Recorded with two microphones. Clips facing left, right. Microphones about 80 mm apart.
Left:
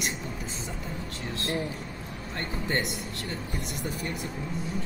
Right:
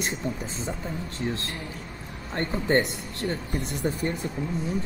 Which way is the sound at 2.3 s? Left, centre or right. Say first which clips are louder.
Right 7 dB; right.